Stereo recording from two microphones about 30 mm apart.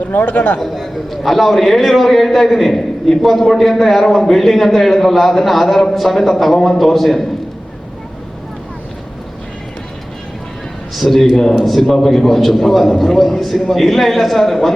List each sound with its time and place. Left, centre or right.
0.2 s a man's voice: left
0.6 s a man's voice: centre
10.9 s a man's voice: centre